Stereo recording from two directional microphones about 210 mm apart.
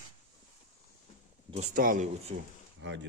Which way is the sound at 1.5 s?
30° right (ahead or behind).